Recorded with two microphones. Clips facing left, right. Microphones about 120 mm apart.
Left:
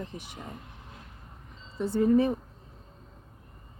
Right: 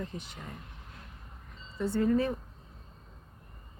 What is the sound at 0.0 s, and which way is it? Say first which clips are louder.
Speech: even; 15° left (ahead or behind).